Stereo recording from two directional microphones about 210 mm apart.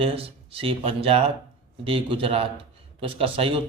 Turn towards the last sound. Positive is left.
turn(degrees=-25)  # may be behind; listen again after turning